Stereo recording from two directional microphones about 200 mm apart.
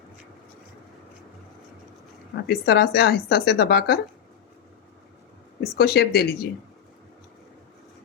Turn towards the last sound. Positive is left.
turn(degrees=50)  # may be behind; listen again after turning